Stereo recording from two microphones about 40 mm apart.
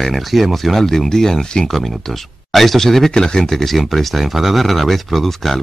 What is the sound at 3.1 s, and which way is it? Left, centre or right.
Speech, left.